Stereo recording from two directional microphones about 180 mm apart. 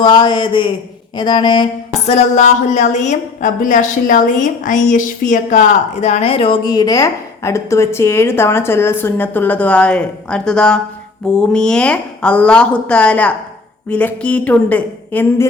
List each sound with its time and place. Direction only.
0.0 s a woman's voice: 25° left (ahead or behind)
2.0 s a woman's voice: 40° left (ahead or behind); by 15.4 s 10° left (ahead or behind)